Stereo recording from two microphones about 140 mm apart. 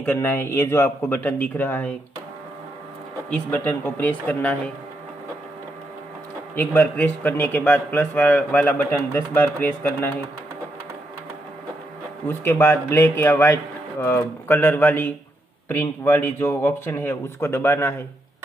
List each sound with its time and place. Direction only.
0.0 s a man's voice: 15° left (ahead or behind)
3.3 s a man's voice: 10° left (ahead or behind)
6.5 s a man's voice: 15° left (ahead or behind)
12.3 s a man's voice: 15° left (ahead or behind)